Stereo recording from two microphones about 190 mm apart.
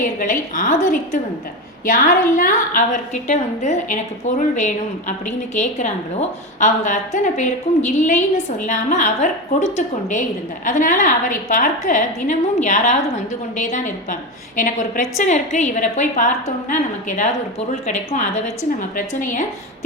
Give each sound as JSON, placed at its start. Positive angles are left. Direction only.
{"t": 0.0, "sound": "a woman's voice", "side_deg": 45}